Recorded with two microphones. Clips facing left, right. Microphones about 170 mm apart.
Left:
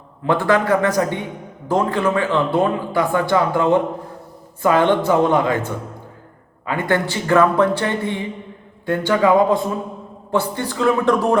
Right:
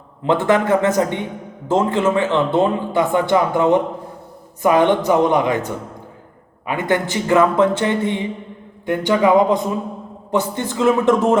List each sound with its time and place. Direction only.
0.2 s speech: 20° right (ahead or behind)